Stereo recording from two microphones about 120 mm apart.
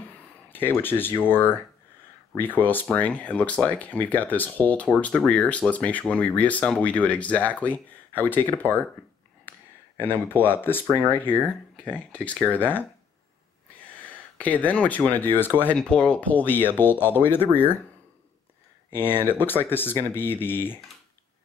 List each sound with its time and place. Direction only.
0.5 s speech: 15° left (ahead or behind)
2.6 s speech: 15° left (ahead or behind)
14.4 s speech: 10° left (ahead or behind)
18.9 s speech: 15° left (ahead or behind)